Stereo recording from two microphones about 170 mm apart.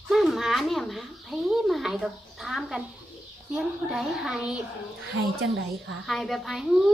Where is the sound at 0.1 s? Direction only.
Centre (ahead or behind).